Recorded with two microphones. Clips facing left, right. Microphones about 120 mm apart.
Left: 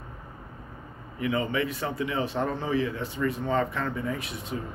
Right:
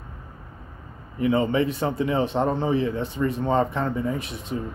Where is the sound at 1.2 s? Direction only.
30° right (ahead or behind).